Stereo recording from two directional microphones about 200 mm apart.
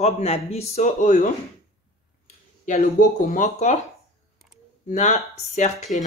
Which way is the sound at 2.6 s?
40° left (ahead or behind).